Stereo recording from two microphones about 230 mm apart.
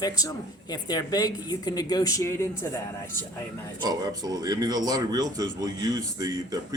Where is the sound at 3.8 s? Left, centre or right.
Centre.